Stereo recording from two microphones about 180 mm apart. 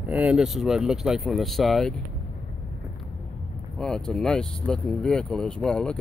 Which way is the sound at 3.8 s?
5° left (ahead or behind).